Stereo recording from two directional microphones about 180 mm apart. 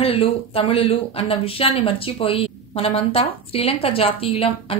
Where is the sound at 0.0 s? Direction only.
30° left (ahead or behind).